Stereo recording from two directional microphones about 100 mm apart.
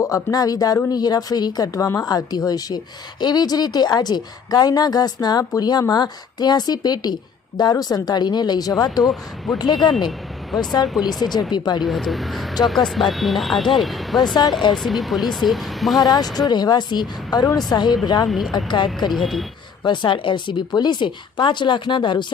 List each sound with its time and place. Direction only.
0.0 s a woman's voice: 35° left (ahead or behind)
9.5 s speech: centre (ahead or behind)
11.5 s a woman's voice: 45° left (ahead or behind)
11.8 s speech: centre (ahead or behind)
16.0 s a woman's voice: 40° left (ahead or behind)
18.3 s speech: centre (ahead or behind)
18.5 s a woman's voice: 50° left (ahead or behind)
19.1 s speech: centre (ahead or behind)
19.8 s a woman's voice: 50° left (ahead or behind)